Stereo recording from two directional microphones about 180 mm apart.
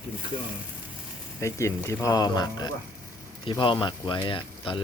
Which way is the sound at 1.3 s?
15° left (ahead or behind).